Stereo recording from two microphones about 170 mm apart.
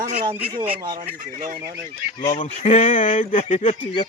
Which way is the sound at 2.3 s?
45° left (ahead or behind).